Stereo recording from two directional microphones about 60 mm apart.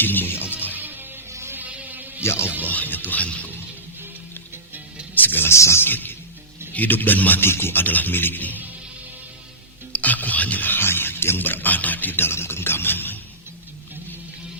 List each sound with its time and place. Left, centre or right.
0.0 s music: left
0.8 s music: right
1.3 s a sound: right
1.5 s insect: right
2.2 s a man's voice: left
2.6 s speech: left
5.1 s music: left
5.5 s a man's voice: left
5.8 s speech: left
9.9 s speech: left